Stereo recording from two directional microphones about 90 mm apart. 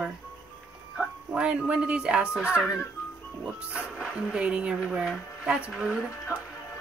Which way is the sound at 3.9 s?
5° right (ahead or behind).